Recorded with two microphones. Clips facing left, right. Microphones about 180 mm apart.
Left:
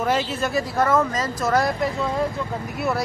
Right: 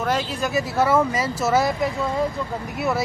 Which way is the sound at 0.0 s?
5° left (ahead or behind).